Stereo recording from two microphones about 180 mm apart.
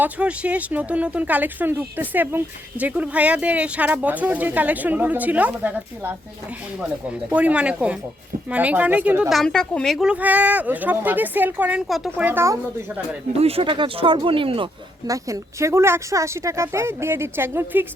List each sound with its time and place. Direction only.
0.0 s speech: 5° right (ahead or behind)
13.4 s speech: 30° right (ahead or behind)
15.0 s speech: 20° right (ahead or behind)